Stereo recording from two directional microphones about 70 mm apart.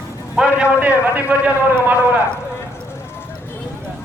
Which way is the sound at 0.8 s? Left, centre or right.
Right.